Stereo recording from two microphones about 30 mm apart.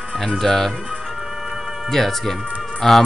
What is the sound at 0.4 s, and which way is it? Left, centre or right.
Speech, centre.